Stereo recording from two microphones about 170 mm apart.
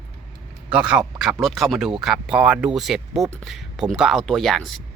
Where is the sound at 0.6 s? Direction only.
5° right (ahead or behind).